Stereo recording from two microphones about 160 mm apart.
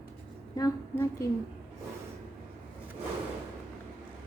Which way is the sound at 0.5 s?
20° left (ahead or behind).